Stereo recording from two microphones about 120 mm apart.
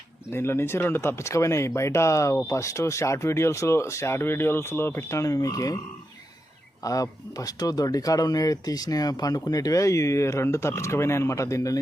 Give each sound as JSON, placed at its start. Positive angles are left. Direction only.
{"t": 0.3, "sound": "speech", "side_deg": 20}
{"t": 6.8, "sound": "speech", "side_deg": 30}